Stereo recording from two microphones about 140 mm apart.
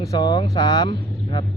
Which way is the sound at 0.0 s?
25° left (ahead or behind).